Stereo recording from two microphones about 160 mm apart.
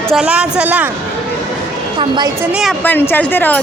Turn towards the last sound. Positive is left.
turn(degrees=10)  # may be behind; listen again after turning